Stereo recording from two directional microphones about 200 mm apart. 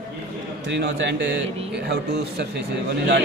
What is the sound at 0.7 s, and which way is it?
Speech, 55° right (ahead or behind).